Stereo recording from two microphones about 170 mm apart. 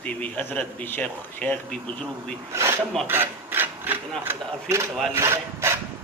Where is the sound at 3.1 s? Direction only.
10° right (ahead or behind).